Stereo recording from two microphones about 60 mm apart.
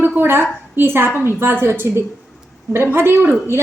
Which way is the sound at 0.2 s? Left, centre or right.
Right.